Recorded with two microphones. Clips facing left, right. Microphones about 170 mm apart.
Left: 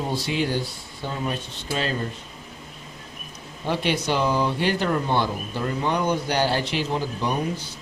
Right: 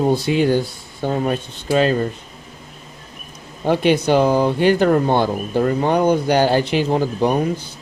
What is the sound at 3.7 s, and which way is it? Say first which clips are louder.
Speech: right 9 dB; 50° right (ahead or behind).